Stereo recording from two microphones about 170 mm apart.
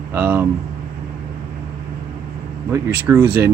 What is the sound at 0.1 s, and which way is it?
Speech, 15° right (ahead or behind).